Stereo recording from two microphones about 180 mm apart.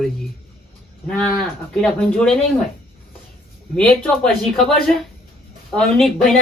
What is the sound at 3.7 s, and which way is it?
A man's voice, 5° left (ahead or behind).